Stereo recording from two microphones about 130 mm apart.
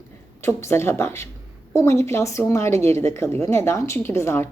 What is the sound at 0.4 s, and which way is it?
A woman's voice, 20° left (ahead or behind).